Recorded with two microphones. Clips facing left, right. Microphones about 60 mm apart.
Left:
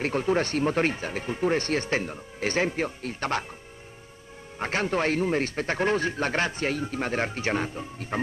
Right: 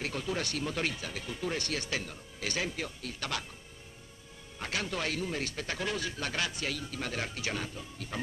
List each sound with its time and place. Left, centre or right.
0.0 s speech: left
4.6 s speech: left